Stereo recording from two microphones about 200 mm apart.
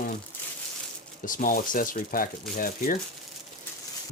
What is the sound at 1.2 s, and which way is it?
Speech, 40° left (ahead or behind).